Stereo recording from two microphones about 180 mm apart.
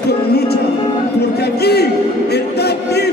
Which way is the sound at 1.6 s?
65° left (ahead or behind).